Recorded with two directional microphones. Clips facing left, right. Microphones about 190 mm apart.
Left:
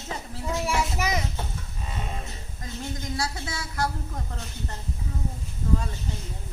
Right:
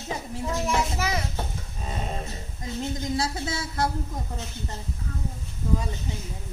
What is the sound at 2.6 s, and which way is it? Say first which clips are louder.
A woman's voice: right 4 dB; 20° right (ahead or behind).